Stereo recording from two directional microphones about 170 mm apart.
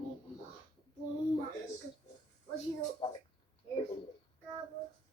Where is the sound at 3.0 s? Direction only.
30° left (ahead or behind).